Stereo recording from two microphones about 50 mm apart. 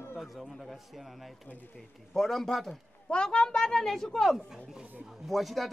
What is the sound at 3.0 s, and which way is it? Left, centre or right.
A woman's voice, left.